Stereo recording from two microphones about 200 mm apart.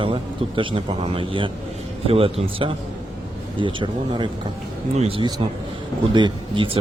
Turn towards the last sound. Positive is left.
turn(degrees=-25)  # may be behind; listen again after turning